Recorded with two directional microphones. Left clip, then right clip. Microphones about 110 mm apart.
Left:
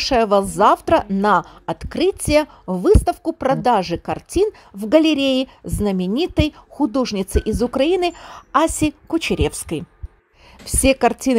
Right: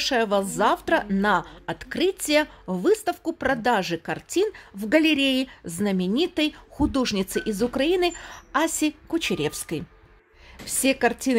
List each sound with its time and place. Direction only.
0.0 s a woman's voice: 50° left (ahead or behind)
6.8 s a woman's voice: 25° left (ahead or behind); by 11.3 s 60° left (ahead or behind)